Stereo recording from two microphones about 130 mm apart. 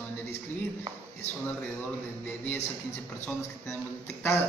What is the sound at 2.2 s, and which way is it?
Speech, 15° left (ahead or behind).